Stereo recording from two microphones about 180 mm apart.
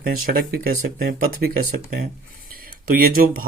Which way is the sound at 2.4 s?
55° right (ahead or behind).